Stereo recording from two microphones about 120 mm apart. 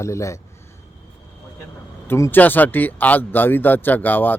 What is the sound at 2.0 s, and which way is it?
Speech, 20° left (ahead or behind).